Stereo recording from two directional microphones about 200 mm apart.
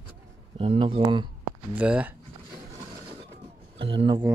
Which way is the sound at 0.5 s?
25° right (ahead or behind).